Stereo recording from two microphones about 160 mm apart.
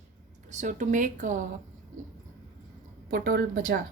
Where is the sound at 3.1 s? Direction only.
65° right (ahead or behind).